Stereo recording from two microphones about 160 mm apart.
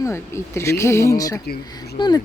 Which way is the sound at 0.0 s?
15° left (ahead or behind).